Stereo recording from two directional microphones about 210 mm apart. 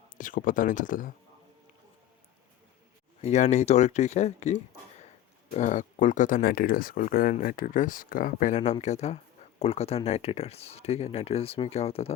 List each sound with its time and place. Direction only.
0.2 s speech: 40° left (ahead or behind)
3.2 s speech: 30° left (ahead or behind)